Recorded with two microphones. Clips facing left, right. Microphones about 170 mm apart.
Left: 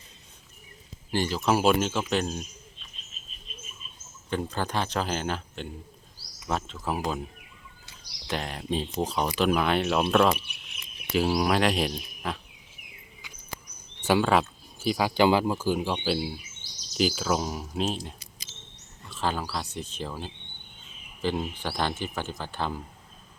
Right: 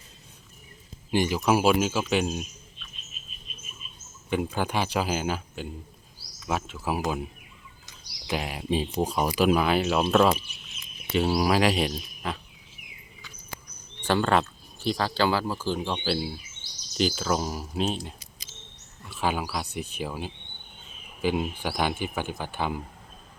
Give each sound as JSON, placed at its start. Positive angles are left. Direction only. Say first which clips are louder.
{"t": 1.1, "sound": "speech", "louder": "right 2 dB", "side_deg": -15}
{"t": 4.3, "sound": "speech", "louder": "right 2 dB", "side_deg": -10}
{"t": 8.3, "sound": "speech", "louder": "right 2 dB", "side_deg": -10}
{"t": 10.3, "sound": "speech", "louder": "right 1 dB", "side_deg": 60}
{"t": 11.1, "sound": "speech", "louder": "right 1 dB", "side_deg": 0}
{"t": 14.0, "sound": "speech", "louder": "left 1 dB", "side_deg": 5}